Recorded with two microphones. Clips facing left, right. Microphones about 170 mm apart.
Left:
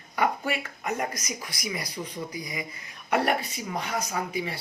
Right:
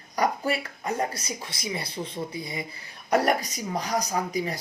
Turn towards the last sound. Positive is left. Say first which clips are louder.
# right 3 dB
turn(degrees=-40)  # may be behind; listen again after turning